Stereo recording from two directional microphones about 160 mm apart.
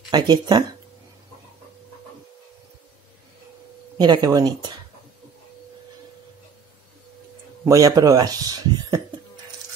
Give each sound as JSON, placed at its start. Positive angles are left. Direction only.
{"t": 0.1, "sound": "speech", "side_deg": -25}
{"t": 4.0, "sound": "speech", "side_deg": -25}
{"t": 7.6, "sound": "speech", "side_deg": -20}